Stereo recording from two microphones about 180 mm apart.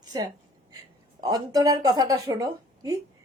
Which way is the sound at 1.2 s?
20° right (ahead or behind).